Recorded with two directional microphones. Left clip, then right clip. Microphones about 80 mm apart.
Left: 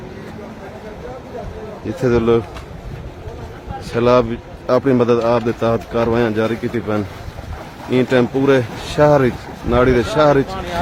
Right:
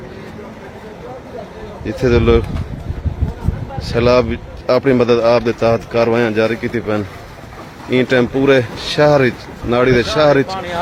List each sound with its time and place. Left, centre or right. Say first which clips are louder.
1.9 s a man's voice: right 2 dB; centre
4.0 s a man's voice: right 1 dB; centre